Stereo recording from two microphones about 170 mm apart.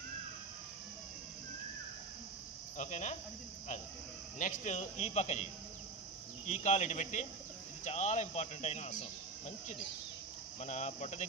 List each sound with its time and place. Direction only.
2.8 s speech: 45° left (ahead or behind)
4.4 s a man's voice: 45° left (ahead or behind)
10.6 s speech: 45° left (ahead or behind)